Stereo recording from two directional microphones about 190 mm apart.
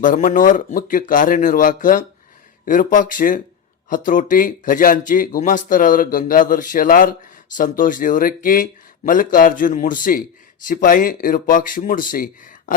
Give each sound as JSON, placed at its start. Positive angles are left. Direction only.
{"t": 0.0, "sound": "speech", "side_deg": 45}